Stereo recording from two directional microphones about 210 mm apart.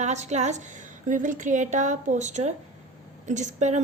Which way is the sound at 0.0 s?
35° right (ahead or behind).